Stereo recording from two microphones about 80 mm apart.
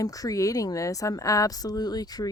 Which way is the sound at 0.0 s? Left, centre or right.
Left.